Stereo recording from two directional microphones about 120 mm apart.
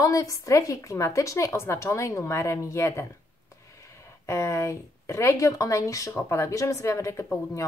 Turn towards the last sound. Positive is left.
turn(degrees=25)  # may be behind; listen again after turning